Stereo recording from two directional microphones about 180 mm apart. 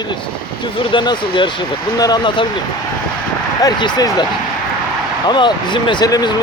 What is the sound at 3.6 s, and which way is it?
Speech, 20° left (ahead or behind).